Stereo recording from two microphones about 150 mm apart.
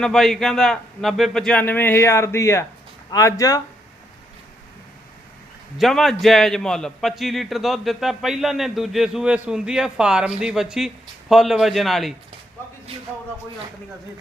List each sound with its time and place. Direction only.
0.0 s a man's voice: centre (ahead or behind); by 3.6 s 20° left (ahead or behind)
5.7 s a man's voice: centre (ahead or behind)